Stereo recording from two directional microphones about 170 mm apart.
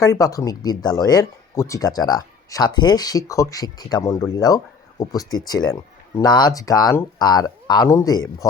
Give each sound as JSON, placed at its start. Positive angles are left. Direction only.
{"t": 0.0, "sound": "speech", "side_deg": 20}